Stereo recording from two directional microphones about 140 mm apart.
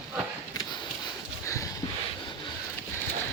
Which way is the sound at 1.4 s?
20° left (ahead or behind).